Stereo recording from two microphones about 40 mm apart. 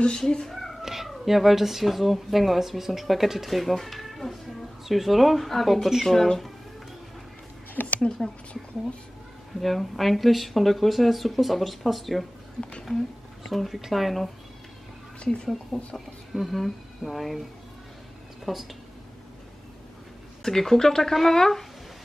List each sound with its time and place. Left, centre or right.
0.0 s speech: centre
0.6 s speech: centre
7.7 s a sound: left
9.6 s speech: centre
13.5 s speech: centre
15.7 s speech: centre
18.4 s speech: centre
20.4 s speech: centre